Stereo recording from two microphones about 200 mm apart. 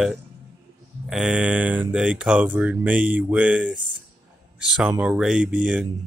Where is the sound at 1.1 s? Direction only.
5° right (ahead or behind).